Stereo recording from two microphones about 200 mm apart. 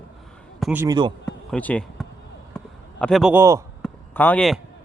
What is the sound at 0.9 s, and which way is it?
Speech, 20° right (ahead or behind).